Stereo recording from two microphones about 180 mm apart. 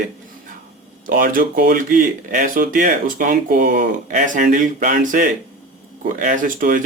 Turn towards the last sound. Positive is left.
turn(degrees=-50)  # may be behind; listen again after turning